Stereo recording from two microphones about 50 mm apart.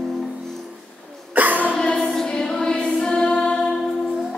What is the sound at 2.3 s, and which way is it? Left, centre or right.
Music, centre.